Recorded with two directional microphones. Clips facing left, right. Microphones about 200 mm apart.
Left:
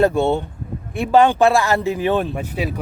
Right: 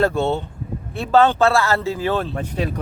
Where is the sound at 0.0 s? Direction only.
15° left (ahead or behind).